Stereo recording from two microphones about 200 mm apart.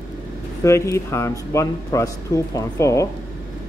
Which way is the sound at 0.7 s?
15° left (ahead or behind).